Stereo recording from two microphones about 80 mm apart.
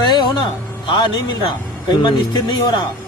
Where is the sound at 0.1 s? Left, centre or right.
Left.